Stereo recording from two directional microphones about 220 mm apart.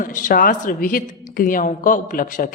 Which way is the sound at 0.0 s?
35° left (ahead or behind).